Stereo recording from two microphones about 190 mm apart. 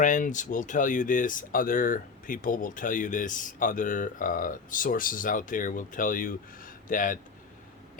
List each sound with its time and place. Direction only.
0.0 s speech: 40° left (ahead or behind)